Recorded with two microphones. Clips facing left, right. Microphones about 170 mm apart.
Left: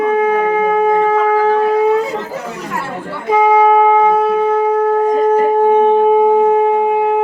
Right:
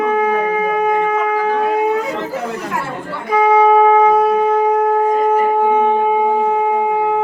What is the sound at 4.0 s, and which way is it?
Shofar, 25° left (ahead or behind).